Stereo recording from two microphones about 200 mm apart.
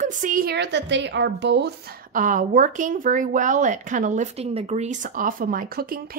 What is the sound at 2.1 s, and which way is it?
Speech, 40° right (ahead or behind).